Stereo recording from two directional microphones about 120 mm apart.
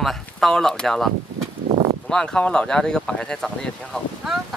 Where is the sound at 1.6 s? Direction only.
80° right.